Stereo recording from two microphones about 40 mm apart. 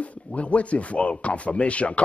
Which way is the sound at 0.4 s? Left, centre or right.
Left.